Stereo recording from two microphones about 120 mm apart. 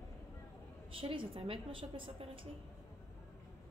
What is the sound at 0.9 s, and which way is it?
A woman's voice, 50° right (ahead or behind).